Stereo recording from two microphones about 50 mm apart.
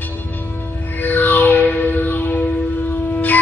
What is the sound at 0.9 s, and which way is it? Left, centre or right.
Music, left.